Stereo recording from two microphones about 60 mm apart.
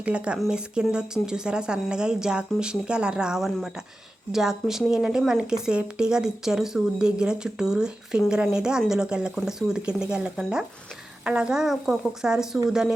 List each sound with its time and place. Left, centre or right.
0.0 s a woman's voice: centre